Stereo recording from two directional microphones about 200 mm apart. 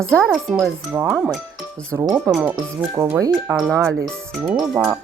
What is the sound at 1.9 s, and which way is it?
Speech, 15° right (ahead or behind).